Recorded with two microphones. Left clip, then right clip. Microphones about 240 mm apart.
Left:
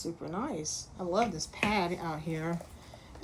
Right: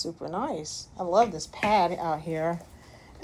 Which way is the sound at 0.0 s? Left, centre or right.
Right.